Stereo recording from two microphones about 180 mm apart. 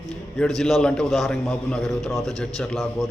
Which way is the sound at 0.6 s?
Centre (ahead or behind).